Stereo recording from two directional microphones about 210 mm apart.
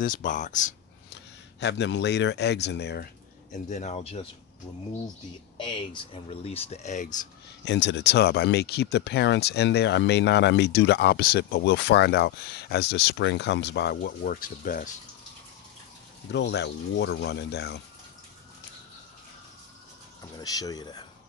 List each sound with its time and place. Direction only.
0.0 s speech: 40° left (ahead or behind)
1.6 s speech: 55° left (ahead or behind)
3.5 s speech: 35° left (ahead or behind)
5.6 s speech: 25° left (ahead or behind)
7.6 s speech: 55° left (ahead or behind); by 14.9 s 40° left (ahead or behind)
16.3 s speech: 55° left (ahead or behind)
20.3 s speech: 15° left (ahead or behind)